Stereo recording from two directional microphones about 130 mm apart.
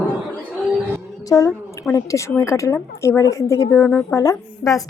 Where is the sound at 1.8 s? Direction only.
25° left (ahead or behind).